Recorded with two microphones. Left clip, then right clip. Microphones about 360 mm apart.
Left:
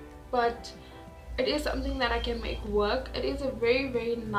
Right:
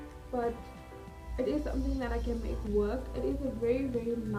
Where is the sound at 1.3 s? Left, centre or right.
Left.